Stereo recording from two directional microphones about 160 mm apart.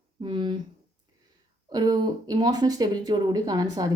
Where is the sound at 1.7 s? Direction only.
25° right (ahead or behind).